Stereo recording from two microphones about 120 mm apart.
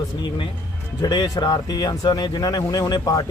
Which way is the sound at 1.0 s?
35° left (ahead or behind).